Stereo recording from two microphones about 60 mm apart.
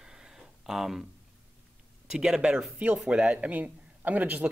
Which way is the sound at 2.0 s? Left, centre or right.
Centre.